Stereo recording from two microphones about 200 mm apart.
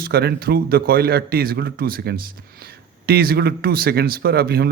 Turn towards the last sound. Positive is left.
turn(degrees=-50)  # may be behind; listen again after turning